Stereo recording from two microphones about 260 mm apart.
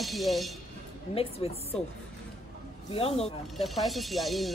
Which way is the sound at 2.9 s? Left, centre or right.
Left.